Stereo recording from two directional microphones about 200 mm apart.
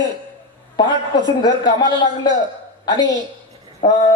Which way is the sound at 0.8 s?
20° left (ahead or behind).